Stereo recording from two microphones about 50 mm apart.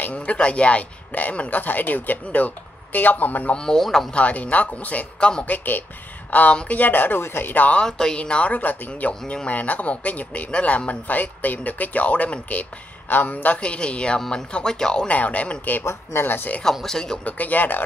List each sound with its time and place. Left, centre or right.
0.1 s speech: left
3.5 s speech: centre
4.1 s speech: left
6.8 s speech: left
7.7 s speech: centre
8.2 s speech: left
15.0 s speech: left
15.8 s speech: left
16.3 s speech: left
16.8 s speech: centre
17.2 s speech: left